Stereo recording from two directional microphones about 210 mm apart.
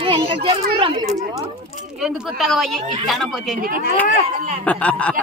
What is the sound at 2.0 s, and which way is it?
A woman's voice, centre (ahead or behind).